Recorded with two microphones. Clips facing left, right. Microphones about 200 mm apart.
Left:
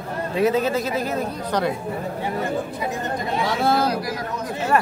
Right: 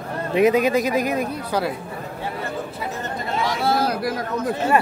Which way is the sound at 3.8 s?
55° right (ahead or behind).